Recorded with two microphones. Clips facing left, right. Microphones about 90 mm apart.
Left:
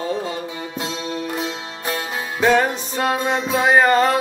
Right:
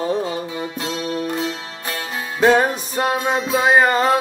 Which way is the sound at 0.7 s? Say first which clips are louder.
Right 1 dB; 25° left (ahead or behind).